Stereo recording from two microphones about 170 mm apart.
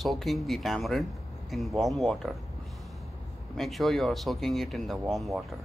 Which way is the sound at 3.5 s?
Centre (ahead or behind).